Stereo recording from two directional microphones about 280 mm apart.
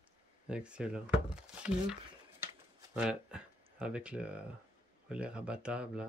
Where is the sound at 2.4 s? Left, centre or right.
Centre.